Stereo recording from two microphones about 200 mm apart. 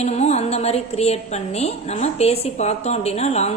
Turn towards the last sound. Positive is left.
turn(degrees=30)  # may be behind; listen again after turning